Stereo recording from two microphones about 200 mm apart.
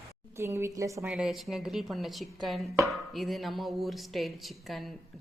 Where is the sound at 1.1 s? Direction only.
Centre (ahead or behind).